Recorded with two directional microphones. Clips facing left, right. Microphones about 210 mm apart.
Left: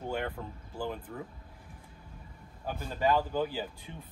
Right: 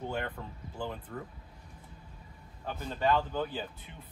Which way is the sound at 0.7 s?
5° left (ahead or behind).